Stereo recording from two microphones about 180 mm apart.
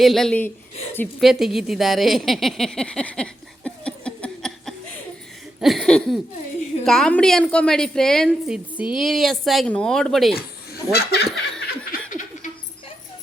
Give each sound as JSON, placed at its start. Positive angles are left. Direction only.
{"t": 0.0, "sound": "a woman's voice", "side_deg": 0}
{"t": 10.9, "sound": "speech", "side_deg": 70}
{"t": 11.3, "sound": "laughter", "side_deg": 5}
{"t": 11.9, "sound": "laughter", "side_deg": 45}